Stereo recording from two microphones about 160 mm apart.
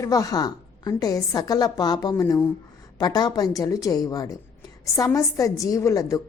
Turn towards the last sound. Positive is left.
turn(degrees=20)  # may be behind; listen again after turning